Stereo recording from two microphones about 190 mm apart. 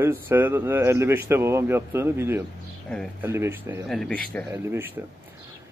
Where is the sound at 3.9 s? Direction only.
Centre (ahead or behind).